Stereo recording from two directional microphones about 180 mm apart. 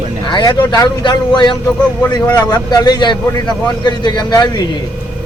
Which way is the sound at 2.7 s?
20° left (ahead or behind).